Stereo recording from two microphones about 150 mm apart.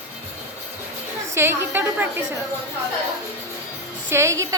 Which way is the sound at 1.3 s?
15° right (ahead or behind).